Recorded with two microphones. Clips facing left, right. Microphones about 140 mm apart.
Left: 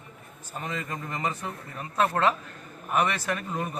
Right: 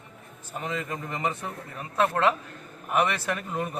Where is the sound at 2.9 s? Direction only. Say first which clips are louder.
Right 1 dB; 15° right (ahead or behind).